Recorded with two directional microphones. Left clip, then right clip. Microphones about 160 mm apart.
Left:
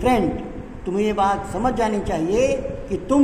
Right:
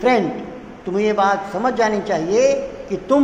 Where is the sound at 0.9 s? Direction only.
20° left (ahead or behind).